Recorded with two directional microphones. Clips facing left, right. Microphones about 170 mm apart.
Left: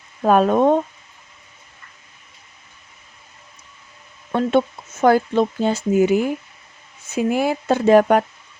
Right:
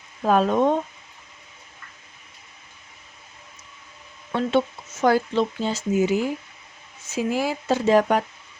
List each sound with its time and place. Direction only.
0.3 s speech: 55° left (ahead or behind)
4.3 s speech: 50° left (ahead or behind)